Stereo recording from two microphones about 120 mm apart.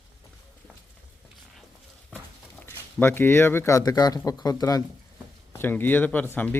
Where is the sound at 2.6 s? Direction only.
20° left (ahead or behind).